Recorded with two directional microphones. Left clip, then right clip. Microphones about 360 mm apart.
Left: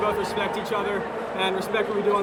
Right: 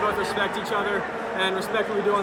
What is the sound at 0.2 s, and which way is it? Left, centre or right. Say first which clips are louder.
Speech: right 1 dB; centre.